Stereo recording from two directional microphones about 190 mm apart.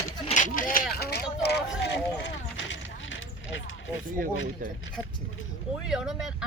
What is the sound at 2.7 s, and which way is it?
Vehicle, 85° left.